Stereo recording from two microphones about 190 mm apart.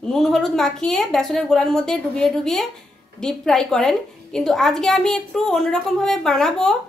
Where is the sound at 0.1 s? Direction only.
Centre (ahead or behind).